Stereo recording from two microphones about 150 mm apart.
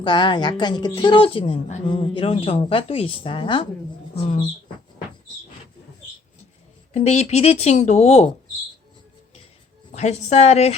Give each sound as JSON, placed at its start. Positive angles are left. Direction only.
{"t": 0.0, "sound": "a woman's voice", "side_deg": 30}
{"t": 6.9, "sound": "a woman's voice", "side_deg": 50}
{"t": 9.9, "sound": "a woman's voice", "side_deg": 50}